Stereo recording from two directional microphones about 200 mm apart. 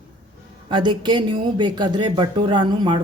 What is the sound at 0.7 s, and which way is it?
Speech, 25° right (ahead or behind).